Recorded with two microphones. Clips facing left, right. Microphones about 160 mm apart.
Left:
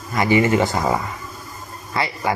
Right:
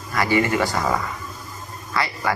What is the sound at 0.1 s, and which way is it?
A man's voice, 20° left (ahead or behind).